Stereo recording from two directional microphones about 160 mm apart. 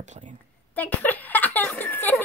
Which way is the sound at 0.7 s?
10° left (ahead or behind).